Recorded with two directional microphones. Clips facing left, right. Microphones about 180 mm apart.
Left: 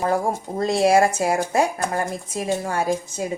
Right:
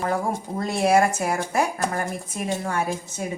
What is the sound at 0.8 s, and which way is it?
Speech, 30° left (ahead or behind).